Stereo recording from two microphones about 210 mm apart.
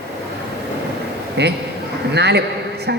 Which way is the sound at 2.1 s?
50° right (ahead or behind).